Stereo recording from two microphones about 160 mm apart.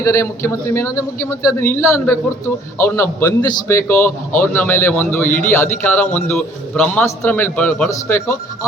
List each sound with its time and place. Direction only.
0.0 s a man's voice: 20° left (ahead or behind)